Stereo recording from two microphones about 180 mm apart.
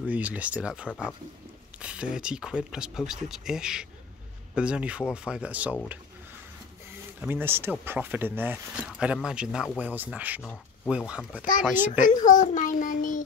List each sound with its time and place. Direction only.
0.0 s speech: 10° right (ahead or behind)
7.2 s speech: 10° right (ahead or behind)
12.0 s a child's voice: 45° left (ahead or behind)